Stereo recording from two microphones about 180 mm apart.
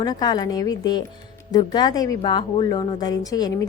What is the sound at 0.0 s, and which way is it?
A woman's voice, 25° left (ahead or behind).